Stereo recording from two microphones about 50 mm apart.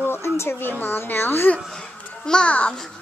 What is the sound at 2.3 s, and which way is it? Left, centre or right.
Speech, left.